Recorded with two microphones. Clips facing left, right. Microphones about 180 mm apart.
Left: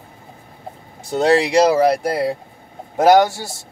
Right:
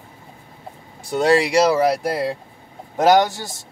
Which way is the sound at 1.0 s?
20° left (ahead or behind).